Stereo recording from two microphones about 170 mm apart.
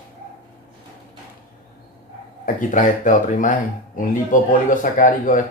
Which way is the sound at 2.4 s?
50° left (ahead or behind).